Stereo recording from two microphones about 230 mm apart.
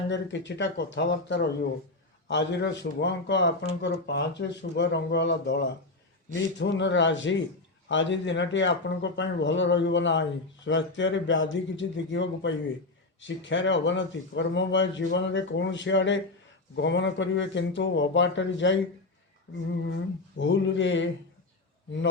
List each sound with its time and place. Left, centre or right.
0.1 s a man's voice: left
20.4 s a man's voice: left